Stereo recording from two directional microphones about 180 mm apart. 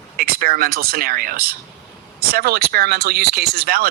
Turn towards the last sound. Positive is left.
turn(degrees=-55)  # may be behind; listen again after turning